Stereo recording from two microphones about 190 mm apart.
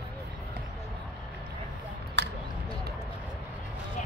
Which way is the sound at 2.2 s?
65° right (ahead or behind).